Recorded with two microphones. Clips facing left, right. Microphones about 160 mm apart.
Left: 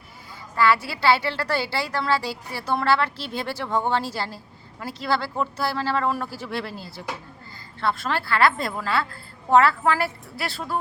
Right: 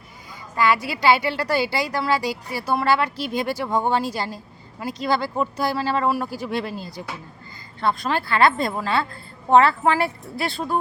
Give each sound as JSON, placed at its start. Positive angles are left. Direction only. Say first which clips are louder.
{"t": 0.5, "sound": "a woman's voice", "louder": "even", "side_deg": -15}